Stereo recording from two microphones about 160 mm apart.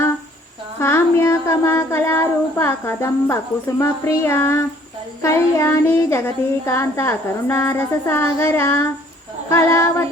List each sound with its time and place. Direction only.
0.8 s child singing: 15° left (ahead or behind)